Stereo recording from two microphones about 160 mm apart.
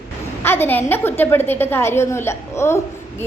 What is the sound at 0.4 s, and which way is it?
A woman's voice, 15° left (ahead or behind).